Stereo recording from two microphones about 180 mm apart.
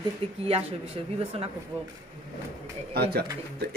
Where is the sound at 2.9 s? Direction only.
60° right (ahead or behind).